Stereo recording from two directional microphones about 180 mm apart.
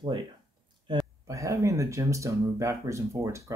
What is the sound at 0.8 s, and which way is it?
Speech, 20° right (ahead or behind).